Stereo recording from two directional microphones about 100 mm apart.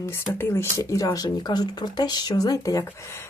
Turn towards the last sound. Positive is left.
turn(degrees=25)  # may be behind; listen again after turning